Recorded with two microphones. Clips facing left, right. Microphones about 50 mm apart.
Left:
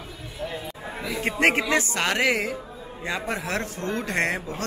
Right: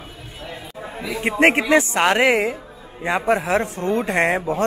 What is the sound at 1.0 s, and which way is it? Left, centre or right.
A man's voice, right.